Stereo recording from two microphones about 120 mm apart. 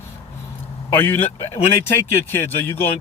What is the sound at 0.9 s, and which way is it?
Speech, 15° left (ahead or behind).